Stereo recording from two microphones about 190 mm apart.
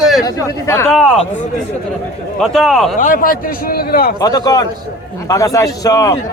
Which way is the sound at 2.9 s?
45° left (ahead or behind).